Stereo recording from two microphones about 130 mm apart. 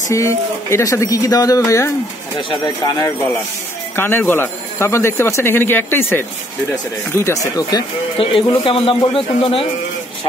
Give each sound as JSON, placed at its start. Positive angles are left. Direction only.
{"t": 0.1, "sound": "speech", "side_deg": 20}
{"t": 3.9, "sound": "speech", "side_deg": 15}
{"t": 8.2, "sound": "speech", "side_deg": 45}